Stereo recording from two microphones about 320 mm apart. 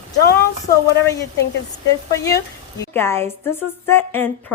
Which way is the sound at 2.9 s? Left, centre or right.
Centre.